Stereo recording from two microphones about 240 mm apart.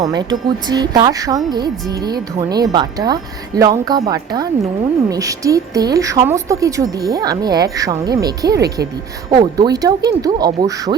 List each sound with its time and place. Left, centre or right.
0.0 s speech: centre
8.5 s speech: right
9.3 s speech: centre